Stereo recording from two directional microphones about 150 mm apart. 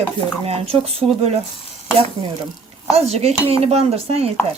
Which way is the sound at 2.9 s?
45° right (ahead or behind).